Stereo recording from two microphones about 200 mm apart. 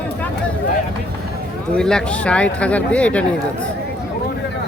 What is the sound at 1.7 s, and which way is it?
Speech, 5° left (ahead or behind).